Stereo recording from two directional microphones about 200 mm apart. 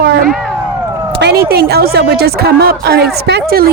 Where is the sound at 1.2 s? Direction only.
55° right (ahead or behind).